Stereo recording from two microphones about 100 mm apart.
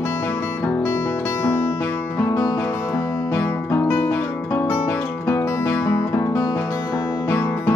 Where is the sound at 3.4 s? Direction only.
25° left (ahead or behind).